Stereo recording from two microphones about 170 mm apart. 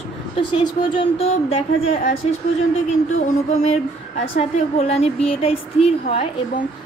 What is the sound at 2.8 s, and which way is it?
Speech, 40° left (ahead or behind).